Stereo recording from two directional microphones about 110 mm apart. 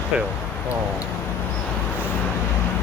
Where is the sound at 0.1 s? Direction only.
10° right (ahead or behind).